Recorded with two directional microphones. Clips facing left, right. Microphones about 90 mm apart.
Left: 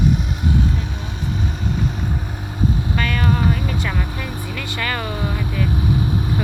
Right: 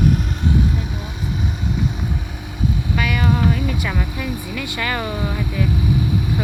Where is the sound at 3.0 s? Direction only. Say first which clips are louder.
Right 2 dB; 10° right (ahead or behind).